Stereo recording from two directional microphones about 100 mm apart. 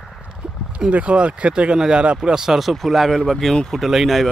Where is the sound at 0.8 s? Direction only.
10° right (ahead or behind).